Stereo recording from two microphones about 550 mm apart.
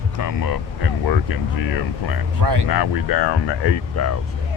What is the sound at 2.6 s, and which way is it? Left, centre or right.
Speech, left.